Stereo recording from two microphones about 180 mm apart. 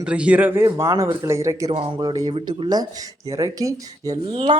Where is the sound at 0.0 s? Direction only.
5° right (ahead or behind).